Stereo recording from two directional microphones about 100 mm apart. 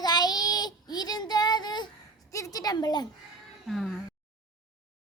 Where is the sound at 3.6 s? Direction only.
Centre (ahead or behind).